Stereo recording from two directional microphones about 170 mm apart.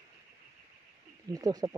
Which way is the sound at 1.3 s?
20° right (ahead or behind).